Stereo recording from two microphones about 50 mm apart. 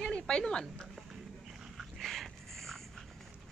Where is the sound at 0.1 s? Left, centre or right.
Centre.